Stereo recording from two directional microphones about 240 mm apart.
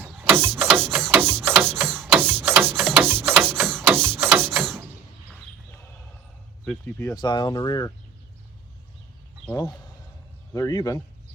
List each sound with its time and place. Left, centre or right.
0.0 s ratchet: centre
0.9 s a sound: centre
6.7 s speech: centre
9.5 s speech: centre